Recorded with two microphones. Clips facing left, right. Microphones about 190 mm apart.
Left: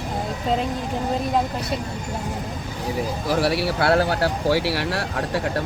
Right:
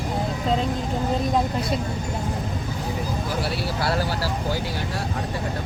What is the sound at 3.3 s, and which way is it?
Speech, 85° left.